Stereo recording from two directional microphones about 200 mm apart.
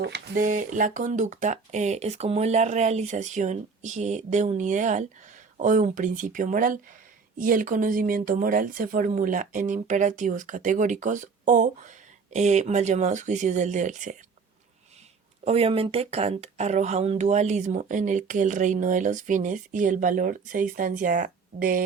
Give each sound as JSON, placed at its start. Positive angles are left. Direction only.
{"t": 0.0, "sound": "speech", "side_deg": -50}
{"t": 15.4, "sound": "speech", "side_deg": -30}